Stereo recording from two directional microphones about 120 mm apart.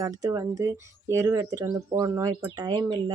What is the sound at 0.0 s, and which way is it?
Speech, 30° right (ahead or behind).